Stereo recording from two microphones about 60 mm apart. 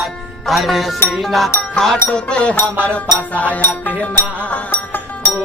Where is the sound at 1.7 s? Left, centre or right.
Centre.